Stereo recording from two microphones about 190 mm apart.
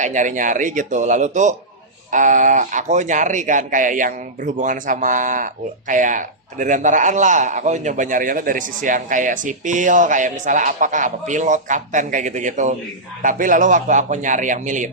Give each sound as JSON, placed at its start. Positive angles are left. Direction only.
{"t": 0.0, "sound": "a man's voice", "side_deg": -40}